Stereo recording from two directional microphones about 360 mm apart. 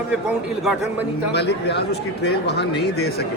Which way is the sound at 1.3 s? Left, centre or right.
Left.